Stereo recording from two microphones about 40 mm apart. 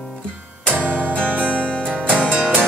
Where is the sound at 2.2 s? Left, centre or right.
Right.